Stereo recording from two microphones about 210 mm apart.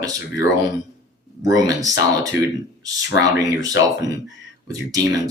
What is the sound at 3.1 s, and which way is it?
Speech, 15° right (ahead or behind).